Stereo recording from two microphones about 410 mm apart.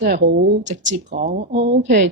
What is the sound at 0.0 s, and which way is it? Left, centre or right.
Speech, right.